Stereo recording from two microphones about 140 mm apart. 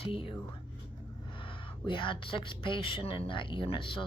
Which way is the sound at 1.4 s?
40° left (ahead or behind).